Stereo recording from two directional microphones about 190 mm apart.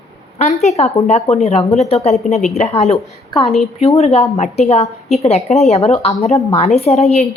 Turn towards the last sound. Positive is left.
turn(degrees=35)  # may be behind; listen again after turning